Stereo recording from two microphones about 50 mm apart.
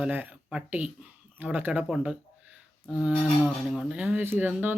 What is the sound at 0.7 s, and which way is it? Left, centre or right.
Speech, right.